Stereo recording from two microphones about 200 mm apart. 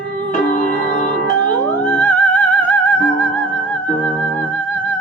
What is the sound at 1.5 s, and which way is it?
Music, 10° left (ahead or behind).